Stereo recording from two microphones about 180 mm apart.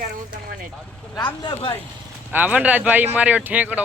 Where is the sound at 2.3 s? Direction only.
10° right (ahead or behind).